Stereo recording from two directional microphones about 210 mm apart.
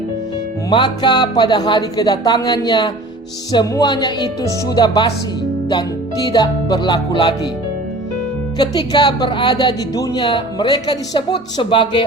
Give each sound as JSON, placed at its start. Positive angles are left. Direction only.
{"t": 0.7, "sound": "speech", "side_deg": 20}
{"t": 6.3, "sound": "speech", "side_deg": 20}
{"t": 8.5, "sound": "speech", "side_deg": 20}